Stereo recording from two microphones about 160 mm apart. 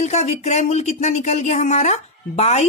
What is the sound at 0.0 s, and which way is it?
Speech, 45° left (ahead or behind).